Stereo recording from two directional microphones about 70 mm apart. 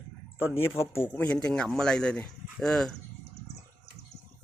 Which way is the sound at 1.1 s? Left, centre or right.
Left.